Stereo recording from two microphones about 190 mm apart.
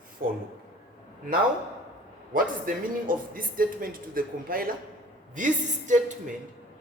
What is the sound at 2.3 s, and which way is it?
Speech, 45° right (ahead or behind).